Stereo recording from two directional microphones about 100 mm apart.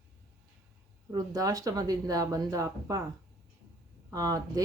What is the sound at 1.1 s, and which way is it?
Speech, 40° right (ahead or behind).